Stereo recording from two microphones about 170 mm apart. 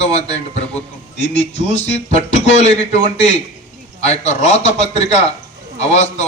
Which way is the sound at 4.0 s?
40° left (ahead or behind).